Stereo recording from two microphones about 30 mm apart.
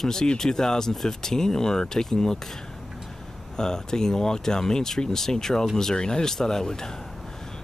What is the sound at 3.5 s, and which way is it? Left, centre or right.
Speech, left.